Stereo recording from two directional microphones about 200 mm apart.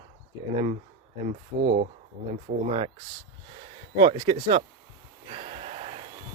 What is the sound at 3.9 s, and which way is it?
Speech, 25° right (ahead or behind).